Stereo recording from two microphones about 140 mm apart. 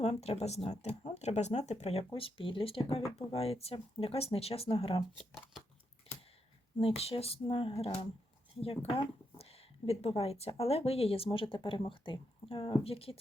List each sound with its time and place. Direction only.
0.0 s speech: 50° left (ahead or behind)
5.1 s speech: centre (ahead or behind)
6.7 s speech: 45° left (ahead or behind)